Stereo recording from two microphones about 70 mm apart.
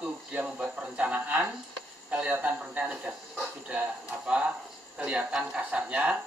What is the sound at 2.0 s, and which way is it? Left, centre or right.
Speech, centre.